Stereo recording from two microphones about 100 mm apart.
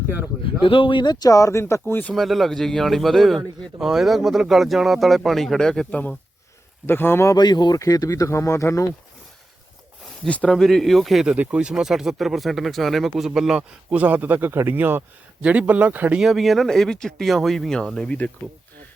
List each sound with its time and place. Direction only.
0.6 s a man's voice: 60° left (ahead or behind); by 2.1 s 20° left (ahead or behind)
2.1 s a man's voice: centre (ahead or behind); by 7.3 s 25° left (ahead or behind)
7.3 s speech: 45° left (ahead or behind)
10.2 s a man's voice: 10° left (ahead or behind)
11.3 s speech: 10° right (ahead or behind)
16.2 s a man's voice: centre (ahead or behind)